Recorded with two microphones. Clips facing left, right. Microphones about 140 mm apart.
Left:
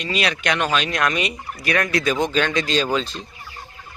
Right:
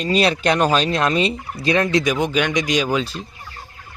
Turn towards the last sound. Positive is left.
turn(degrees=-10)  # may be behind; listen again after turning